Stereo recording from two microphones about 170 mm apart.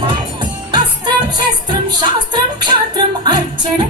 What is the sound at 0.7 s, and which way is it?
Music, 25° right (ahead or behind).